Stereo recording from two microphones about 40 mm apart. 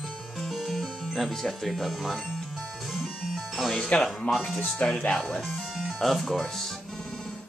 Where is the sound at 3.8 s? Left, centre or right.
Centre.